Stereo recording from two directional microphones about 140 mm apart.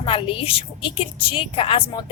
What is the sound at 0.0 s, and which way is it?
A woman's voice, 40° left (ahead or behind).